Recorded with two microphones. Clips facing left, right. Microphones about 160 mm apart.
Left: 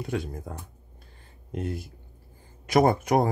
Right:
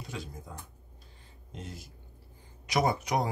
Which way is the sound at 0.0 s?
55° left (ahead or behind).